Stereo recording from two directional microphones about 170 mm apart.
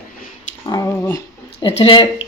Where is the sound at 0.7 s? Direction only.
20° left (ahead or behind).